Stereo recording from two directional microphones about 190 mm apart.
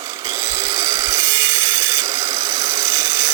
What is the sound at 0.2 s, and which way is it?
Tools, 15° right (ahead or behind).